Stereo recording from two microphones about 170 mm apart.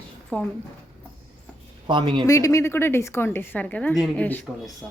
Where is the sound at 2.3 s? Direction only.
20° left (ahead or behind).